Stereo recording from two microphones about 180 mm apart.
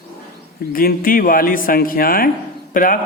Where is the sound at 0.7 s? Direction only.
55° left (ahead or behind).